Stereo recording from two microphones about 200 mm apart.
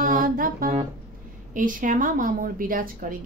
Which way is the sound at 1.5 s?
40° right (ahead or behind).